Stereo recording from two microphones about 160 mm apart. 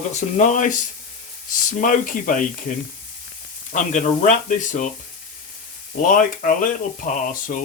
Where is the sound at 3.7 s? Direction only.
50° left (ahead or behind).